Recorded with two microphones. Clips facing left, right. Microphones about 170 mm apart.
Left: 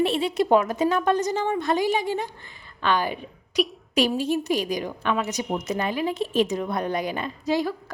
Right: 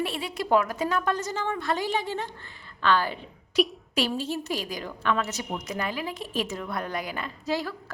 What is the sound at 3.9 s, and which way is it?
A woman's voice, 15° left (ahead or behind).